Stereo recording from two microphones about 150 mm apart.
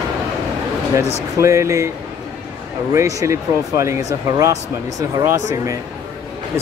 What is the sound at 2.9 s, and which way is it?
Speech, 20° right (ahead or behind).